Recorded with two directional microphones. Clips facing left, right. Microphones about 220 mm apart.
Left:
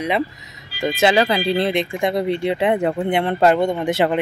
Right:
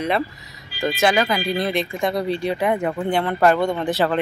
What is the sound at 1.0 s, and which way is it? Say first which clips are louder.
Speech: left 3 dB; 30° left (ahead or behind).